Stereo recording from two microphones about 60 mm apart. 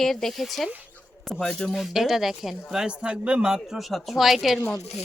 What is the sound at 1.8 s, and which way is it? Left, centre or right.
Speech, centre.